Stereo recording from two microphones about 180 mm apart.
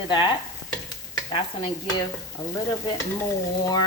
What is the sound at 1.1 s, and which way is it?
Stir, 25° left (ahead or behind).